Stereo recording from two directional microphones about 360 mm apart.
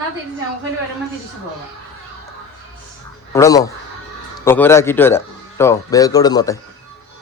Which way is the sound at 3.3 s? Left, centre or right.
Centre.